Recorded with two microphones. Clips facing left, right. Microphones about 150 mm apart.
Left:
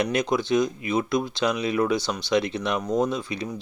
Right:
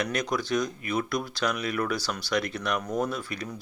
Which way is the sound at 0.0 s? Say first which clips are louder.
Left 5 dB; 25° left (ahead or behind).